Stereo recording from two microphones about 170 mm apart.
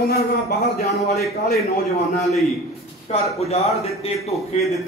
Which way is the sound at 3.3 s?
40° left (ahead or behind).